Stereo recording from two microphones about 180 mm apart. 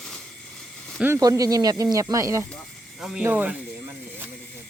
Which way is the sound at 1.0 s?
15° right (ahead or behind).